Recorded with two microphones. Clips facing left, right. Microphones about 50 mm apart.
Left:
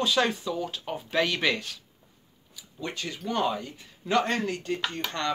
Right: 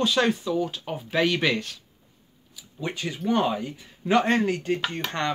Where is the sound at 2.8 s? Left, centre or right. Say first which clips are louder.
Right 4 dB; centre.